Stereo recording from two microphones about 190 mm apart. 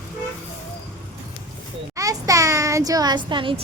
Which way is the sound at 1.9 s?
15° right (ahead or behind).